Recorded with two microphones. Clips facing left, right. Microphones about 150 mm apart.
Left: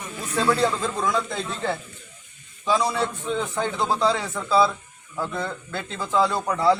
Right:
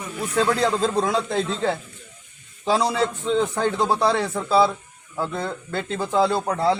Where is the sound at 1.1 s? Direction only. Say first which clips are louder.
Right 3 dB; 70° right (ahead or behind).